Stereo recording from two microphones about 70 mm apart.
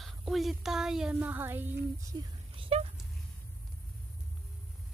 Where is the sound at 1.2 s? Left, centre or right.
Right.